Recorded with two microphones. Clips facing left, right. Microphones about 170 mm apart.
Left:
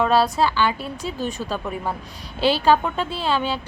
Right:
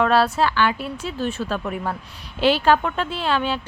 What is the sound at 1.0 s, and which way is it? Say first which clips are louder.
Speech: right 1 dB; 40° left (ahead or behind).